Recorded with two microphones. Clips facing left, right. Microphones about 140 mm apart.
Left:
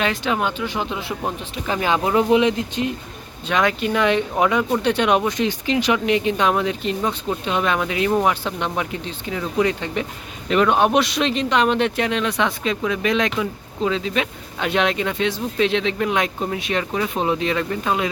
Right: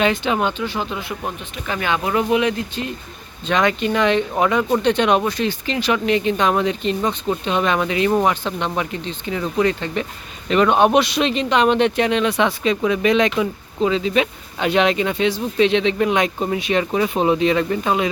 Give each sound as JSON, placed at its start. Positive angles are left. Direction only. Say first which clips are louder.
{"t": 0.0, "sound": "speech", "louder": "right 3 dB", "side_deg": 0}
{"t": 3.4, "sound": "speech", "louder": "right 2 dB", "side_deg": 5}